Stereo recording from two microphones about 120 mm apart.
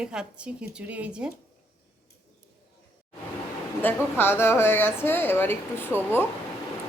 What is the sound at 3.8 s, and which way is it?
Speech, 15° left (ahead or behind).